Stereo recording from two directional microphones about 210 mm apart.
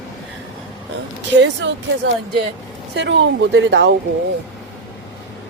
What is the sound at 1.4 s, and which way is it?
Speech, 55° right (ahead or behind).